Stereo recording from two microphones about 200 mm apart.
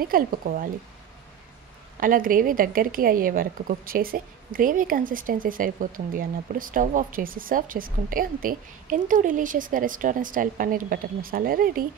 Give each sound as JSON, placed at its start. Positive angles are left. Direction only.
{"t": 0.0, "sound": "a woman's voice", "side_deg": -45}
{"t": 2.0, "sound": "a woman's voice", "side_deg": -45}